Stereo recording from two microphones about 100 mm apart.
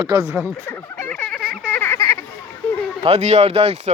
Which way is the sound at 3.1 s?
90° right.